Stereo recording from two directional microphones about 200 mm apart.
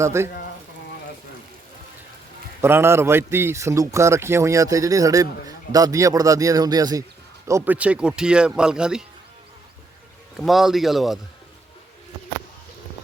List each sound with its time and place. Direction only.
0.0 s a man's voice: 15° right (ahead or behind)
2.6 s a man's voice: 10° right (ahead or behind)
10.3 s speech: centre (ahead or behind)